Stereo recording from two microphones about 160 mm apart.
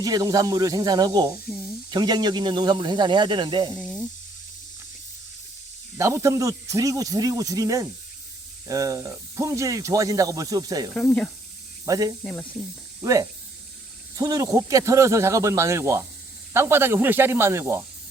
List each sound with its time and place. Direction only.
0.0 s speech: 25° right (ahead or behind)
3.8 s snake: 5° left (ahead or behind)
6.0 s speech: 20° right (ahead or behind)
10.9 s speech: 10° left (ahead or behind)
11.9 s speech: 25° right (ahead or behind)
12.2 s speech: 10° left (ahead or behind)
13.0 s speech: 20° right (ahead or behind)